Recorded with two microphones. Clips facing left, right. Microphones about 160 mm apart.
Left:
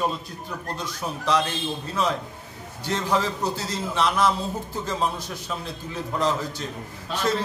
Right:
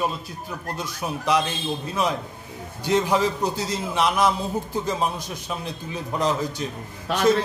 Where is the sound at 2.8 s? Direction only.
15° right (ahead or behind).